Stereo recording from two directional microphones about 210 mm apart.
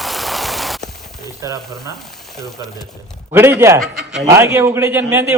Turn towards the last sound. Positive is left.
turn(degrees=-15)  # may be behind; listen again after turning